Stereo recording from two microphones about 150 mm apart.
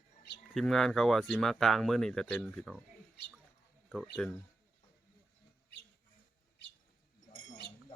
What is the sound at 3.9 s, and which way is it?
Speech, 5° left (ahead or behind).